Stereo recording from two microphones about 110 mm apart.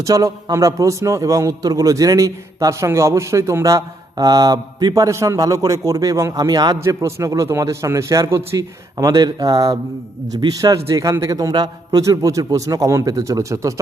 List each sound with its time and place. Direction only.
0.0 s a man's voice: 30° right (ahead or behind)
6.7 s a man's voice: 25° right (ahead or behind)